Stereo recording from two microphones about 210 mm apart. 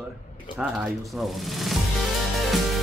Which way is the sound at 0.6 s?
5° right (ahead or behind).